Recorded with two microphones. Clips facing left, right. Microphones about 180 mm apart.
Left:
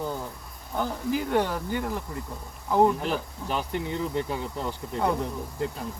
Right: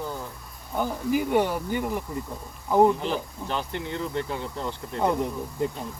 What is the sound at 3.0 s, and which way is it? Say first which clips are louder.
Speech: right 1 dB; 10° left (ahead or behind).